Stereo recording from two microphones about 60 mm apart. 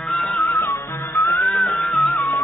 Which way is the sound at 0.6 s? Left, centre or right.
Left.